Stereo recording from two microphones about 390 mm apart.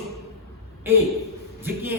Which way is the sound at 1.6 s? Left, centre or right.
Centre.